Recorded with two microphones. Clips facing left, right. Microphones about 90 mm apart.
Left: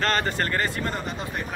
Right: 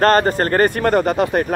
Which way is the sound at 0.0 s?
45° right (ahead or behind).